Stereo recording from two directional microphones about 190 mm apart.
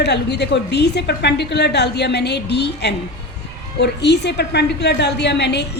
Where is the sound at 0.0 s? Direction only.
60° left (ahead or behind).